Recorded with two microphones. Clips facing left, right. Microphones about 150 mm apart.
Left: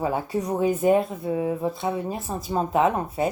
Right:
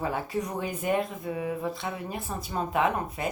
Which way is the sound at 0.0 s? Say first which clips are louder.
Left 4 dB; 35° left (ahead or behind).